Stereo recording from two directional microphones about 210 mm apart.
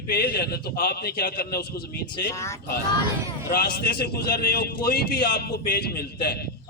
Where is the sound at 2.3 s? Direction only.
15° left (ahead or behind).